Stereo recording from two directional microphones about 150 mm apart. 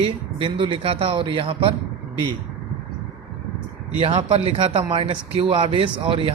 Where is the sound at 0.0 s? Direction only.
35° right (ahead or behind).